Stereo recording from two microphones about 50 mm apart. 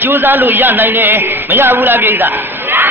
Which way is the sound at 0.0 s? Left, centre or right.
Right.